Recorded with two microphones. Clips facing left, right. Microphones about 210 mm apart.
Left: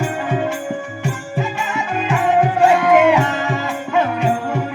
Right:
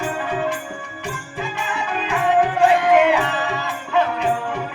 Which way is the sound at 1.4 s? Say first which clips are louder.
Left 3 dB; 50° left (ahead or behind).